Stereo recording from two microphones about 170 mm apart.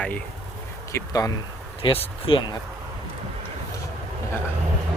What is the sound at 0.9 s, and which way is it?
Speech, 20° left (ahead or behind).